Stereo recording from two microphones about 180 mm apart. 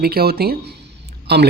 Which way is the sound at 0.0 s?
60° right (ahead or behind).